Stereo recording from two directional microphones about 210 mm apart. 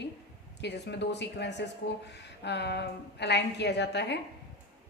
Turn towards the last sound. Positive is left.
turn(degrees=55)  # may be behind; listen again after turning